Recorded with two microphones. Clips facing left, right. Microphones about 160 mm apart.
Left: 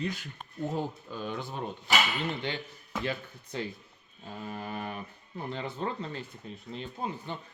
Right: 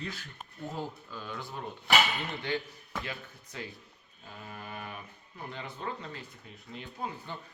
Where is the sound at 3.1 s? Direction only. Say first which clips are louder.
Left 7 dB; 30° left (ahead or behind).